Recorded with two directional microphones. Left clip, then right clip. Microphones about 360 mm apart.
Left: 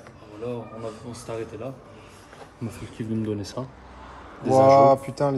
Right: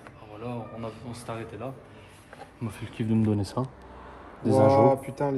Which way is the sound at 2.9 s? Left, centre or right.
Centre.